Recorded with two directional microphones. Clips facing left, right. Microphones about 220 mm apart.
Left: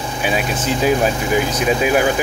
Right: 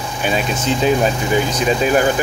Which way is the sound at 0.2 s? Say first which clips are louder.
Right 1 dB; 5° left (ahead or behind).